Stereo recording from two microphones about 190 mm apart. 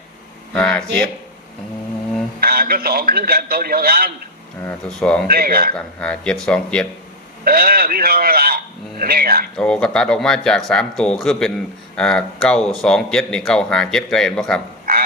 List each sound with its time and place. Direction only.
0.5 s speech: 5° left (ahead or behind)
2.4 s speech: 50° right (ahead or behind)
4.6 s speech: 5° left (ahead or behind)
5.3 s speech: 50° right (ahead or behind)
5.7 s speech: 5° left (ahead or behind)
7.4 s speech: 50° right (ahead or behind)
9.6 s speech: 5° left (ahead or behind)